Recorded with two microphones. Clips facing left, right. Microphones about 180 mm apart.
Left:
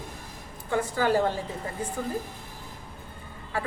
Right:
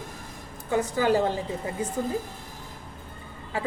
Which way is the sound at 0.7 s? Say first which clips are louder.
Right 2 dB; 15° right (ahead or behind).